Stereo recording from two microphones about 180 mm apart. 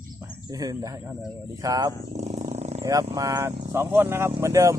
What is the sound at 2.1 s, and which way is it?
Wild animals, 40° right (ahead or behind).